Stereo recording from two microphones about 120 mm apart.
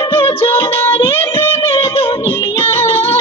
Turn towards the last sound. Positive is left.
turn(degrees=20)  # may be behind; listen again after turning